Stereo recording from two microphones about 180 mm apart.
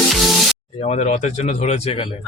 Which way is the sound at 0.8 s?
40° left (ahead or behind).